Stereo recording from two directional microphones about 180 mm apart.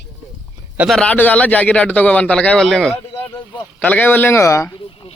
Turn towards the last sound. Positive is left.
turn(degrees=30)  # may be behind; listen again after turning